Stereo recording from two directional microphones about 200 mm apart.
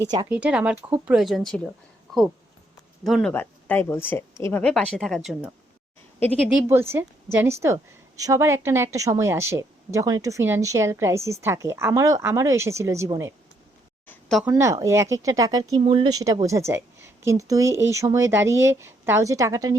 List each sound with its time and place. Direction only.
0.3 s speech: 5° right (ahead or behind)
3.0 s speech: centre (ahead or behind)
6.7 s a woman's voice: 10° right (ahead or behind)
14.1 s a sound: centre (ahead or behind)
14.4 s a woman's voice: 15° right (ahead or behind)